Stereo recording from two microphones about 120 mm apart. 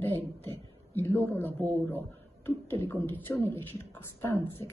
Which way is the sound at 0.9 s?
20° left (ahead or behind).